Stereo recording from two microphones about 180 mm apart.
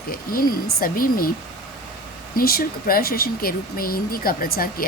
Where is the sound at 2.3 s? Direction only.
55° left (ahead or behind).